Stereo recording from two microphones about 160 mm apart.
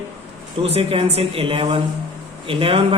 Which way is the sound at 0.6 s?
40° right (ahead or behind).